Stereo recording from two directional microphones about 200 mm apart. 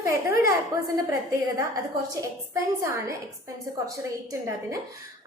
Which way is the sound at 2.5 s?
15° right (ahead or behind).